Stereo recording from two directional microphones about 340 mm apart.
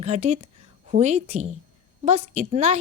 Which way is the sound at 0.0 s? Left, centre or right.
Centre.